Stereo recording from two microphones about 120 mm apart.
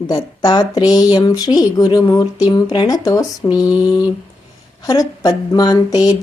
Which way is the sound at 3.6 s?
10° right (ahead or behind).